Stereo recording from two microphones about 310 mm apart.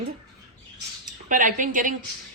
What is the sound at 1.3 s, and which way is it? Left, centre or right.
Speech, right.